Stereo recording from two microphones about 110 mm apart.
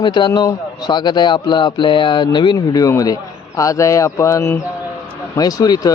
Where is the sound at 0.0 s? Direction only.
45° left (ahead or behind).